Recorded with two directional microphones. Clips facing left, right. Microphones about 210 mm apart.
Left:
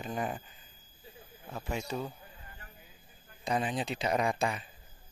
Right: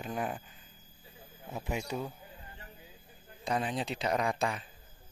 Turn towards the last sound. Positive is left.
turn(degrees=5)  # may be behind; listen again after turning